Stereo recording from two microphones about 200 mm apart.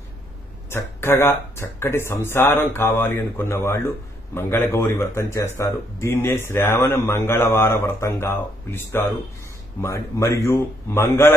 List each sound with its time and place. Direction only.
0.7 s speech: 15° left (ahead or behind)